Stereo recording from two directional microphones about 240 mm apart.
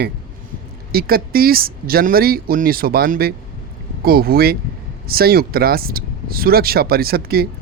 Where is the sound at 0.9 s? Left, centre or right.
Right.